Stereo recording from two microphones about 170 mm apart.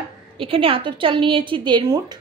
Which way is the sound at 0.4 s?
30° right (ahead or behind).